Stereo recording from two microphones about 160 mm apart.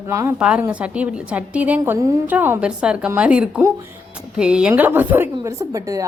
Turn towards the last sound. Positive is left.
turn(degrees=-20)  # may be behind; listen again after turning